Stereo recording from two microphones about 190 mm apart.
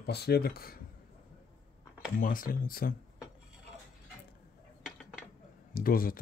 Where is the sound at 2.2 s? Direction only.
45° left (ahead or behind).